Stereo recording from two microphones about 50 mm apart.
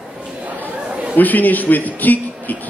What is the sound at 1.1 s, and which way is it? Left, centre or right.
A man's voice, left.